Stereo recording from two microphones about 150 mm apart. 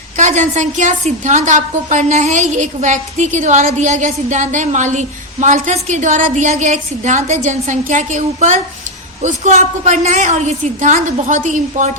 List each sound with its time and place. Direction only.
0.2 s a woman's voice: 55° right (ahead or behind)